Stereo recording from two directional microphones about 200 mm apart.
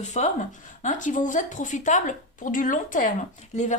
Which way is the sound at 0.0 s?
35° left (ahead or behind).